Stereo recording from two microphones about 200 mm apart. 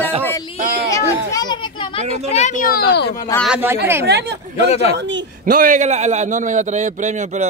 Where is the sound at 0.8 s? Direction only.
15° left (ahead or behind).